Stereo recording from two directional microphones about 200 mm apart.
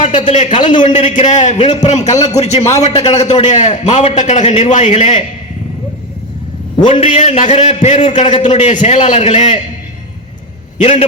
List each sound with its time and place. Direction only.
0.0 s a man's voice: 40° left (ahead or behind)
6.9 s a man's voice: 30° left (ahead or behind)